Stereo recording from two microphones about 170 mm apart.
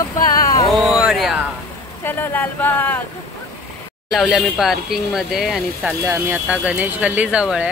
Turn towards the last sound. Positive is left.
turn(degrees=-5)  # may be behind; listen again after turning